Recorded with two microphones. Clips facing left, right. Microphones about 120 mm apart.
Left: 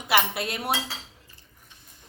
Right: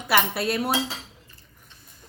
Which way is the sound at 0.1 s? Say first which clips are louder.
Right 2 dB; 20° left (ahead or behind).